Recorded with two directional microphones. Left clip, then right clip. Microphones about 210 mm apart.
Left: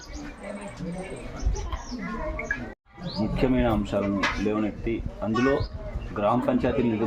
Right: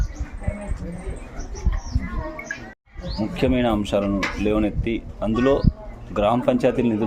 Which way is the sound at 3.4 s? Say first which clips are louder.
Right 4 dB; 50° right (ahead or behind).